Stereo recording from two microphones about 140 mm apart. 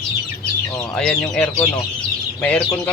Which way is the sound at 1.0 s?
5° left (ahead or behind).